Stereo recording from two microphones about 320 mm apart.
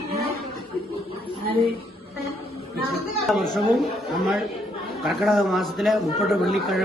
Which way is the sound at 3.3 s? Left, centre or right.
Centre.